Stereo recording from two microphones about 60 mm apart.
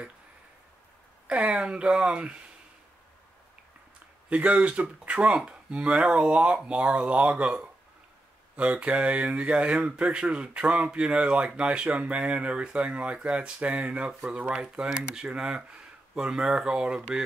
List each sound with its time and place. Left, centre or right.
1.2 s speech: centre
4.3 s speech: right